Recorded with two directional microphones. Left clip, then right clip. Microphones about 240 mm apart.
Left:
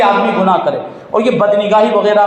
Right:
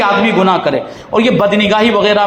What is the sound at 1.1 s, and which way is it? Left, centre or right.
A man's voice, right.